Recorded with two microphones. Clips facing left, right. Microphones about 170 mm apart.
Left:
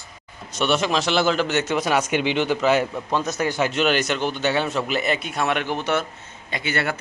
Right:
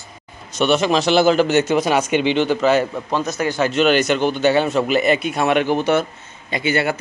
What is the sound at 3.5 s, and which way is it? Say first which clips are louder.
Speech: right 6 dB; 10° left (ahead or behind).